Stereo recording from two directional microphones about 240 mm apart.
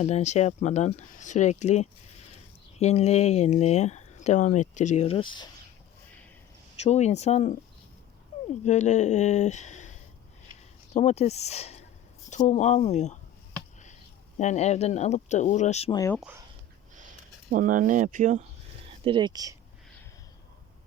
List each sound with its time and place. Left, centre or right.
0.0 s speech: left
6.7 s speech: left
8.6 s speech: left
10.9 s speech: left
14.3 s speech: left
17.5 s speech: right
19.0 s speech: centre